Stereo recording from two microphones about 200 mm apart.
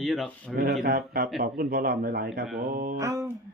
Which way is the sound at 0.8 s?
50° right (ahead or behind).